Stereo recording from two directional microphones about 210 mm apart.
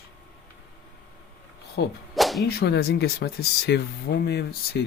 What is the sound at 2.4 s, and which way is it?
Speech, 50° left (ahead or behind).